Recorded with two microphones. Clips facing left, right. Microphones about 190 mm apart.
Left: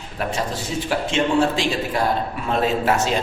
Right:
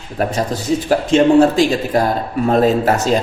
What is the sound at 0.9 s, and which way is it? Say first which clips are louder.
A man's voice: right 9 dB; 40° right (ahead or behind).